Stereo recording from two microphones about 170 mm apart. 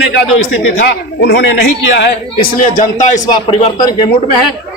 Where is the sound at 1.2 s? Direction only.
90° left.